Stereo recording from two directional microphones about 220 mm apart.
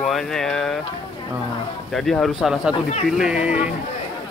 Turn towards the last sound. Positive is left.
turn(degrees=-5)  # may be behind; listen again after turning